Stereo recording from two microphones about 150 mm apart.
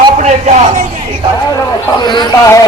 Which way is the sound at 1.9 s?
30° left (ahead or behind).